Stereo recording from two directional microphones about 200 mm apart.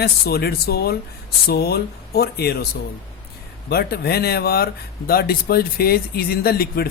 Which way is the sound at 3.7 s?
50° left (ahead or behind).